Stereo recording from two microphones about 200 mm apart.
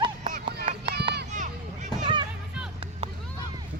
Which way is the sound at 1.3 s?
35° right (ahead or behind).